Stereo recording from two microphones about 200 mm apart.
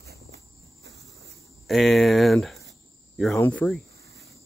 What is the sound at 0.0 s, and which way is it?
Cricket, 55° right (ahead or behind).